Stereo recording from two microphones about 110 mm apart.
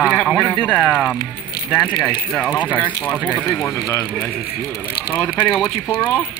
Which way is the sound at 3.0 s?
15° left (ahead or behind).